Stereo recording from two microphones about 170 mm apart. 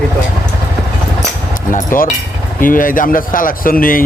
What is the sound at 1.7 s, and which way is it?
A man's voice, 50° left (ahead or behind).